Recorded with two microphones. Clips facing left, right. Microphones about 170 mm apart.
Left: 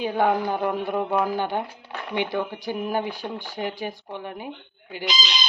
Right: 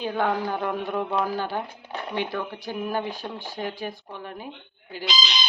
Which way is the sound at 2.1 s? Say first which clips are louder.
Left 4 dB; 15° left (ahead or behind).